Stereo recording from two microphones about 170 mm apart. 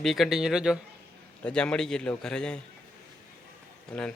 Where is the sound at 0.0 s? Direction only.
Centre (ahead or behind).